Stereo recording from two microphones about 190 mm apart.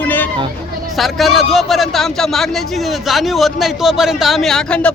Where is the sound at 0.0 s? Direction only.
10° left (ahead or behind).